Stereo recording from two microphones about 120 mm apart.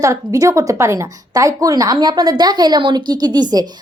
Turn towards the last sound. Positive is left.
turn(degrees=-35)  # may be behind; listen again after turning